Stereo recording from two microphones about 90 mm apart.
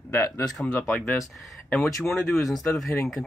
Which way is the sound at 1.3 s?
Centre (ahead or behind).